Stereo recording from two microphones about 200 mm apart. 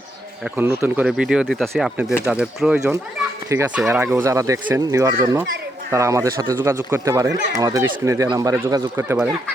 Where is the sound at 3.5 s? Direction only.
15° right (ahead or behind).